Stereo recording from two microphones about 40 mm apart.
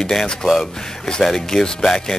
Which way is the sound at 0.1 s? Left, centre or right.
Centre.